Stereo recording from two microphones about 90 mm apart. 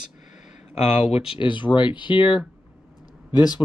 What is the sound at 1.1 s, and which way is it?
Speech, 85° left.